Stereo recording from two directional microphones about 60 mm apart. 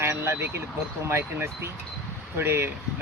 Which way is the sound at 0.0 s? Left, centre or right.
Right.